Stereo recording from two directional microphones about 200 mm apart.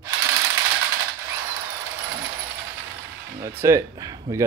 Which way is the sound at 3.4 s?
15° right (ahead or behind).